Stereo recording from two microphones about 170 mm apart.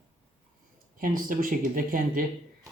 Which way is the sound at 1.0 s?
55° right (ahead or behind).